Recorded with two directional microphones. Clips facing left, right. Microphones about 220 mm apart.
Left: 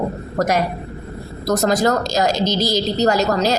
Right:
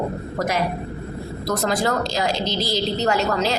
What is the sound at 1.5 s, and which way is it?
A woman's voice, 45° left (ahead or behind).